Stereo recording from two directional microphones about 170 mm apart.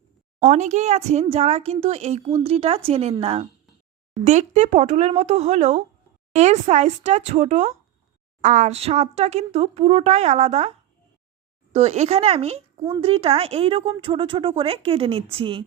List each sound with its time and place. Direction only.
0.3 s speech: 45° right (ahead or behind)